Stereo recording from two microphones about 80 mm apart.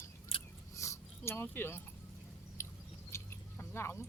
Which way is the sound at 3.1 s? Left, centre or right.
Left.